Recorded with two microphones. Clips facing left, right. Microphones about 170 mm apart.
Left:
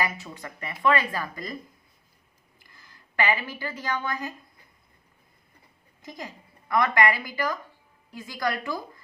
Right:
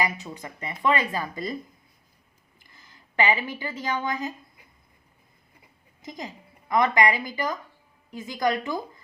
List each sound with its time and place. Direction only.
0.0 s a woman's voice: 20° right (ahead or behind)
2.7 s a woman's voice: 20° right (ahead or behind)
6.1 s a woman's voice: 20° right (ahead or behind)